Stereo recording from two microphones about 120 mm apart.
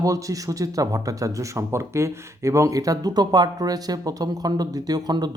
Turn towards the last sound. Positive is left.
turn(degrees=-35)  # may be behind; listen again after turning